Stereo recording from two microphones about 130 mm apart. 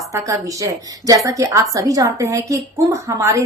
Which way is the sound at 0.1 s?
25° right (ahead or behind).